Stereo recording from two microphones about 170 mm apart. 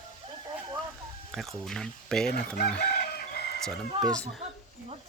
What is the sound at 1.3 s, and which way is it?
Speech, centre (ahead or behind).